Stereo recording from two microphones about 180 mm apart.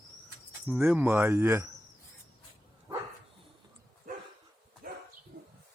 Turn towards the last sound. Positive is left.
turn(degrees=-50)  # may be behind; listen again after turning